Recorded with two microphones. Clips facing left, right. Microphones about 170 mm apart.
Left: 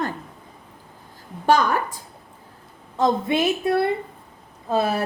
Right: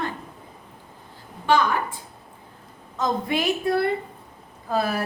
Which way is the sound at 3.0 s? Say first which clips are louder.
Left 4 dB; 25° left (ahead or behind).